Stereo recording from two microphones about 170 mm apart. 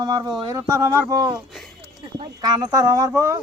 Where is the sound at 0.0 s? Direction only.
25° right (ahead or behind).